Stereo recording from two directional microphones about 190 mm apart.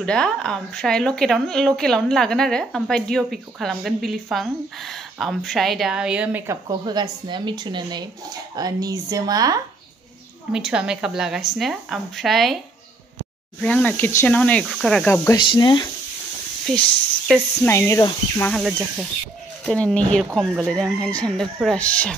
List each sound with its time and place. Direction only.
0.0 s a woman's voice: 5° left (ahead or behind); by 9.6 s 20° right (ahead or behind)
10.5 s a woman's voice: 5° right (ahead or behind)
13.6 s speech: 5° left (ahead or behind)
15.3 s speech: 25° left (ahead or behind)
16.7 s a woman's voice: centre (ahead or behind)
17.6 s speech: 15° left (ahead or behind)
18.5 s a woman's voice: centre (ahead or behind)